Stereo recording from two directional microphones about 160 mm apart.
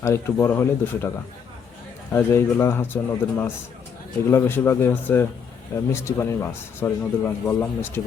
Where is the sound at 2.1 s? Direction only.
15° left (ahead or behind).